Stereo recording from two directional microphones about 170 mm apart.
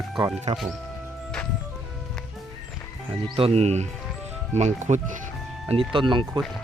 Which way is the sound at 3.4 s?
35° right (ahead or behind).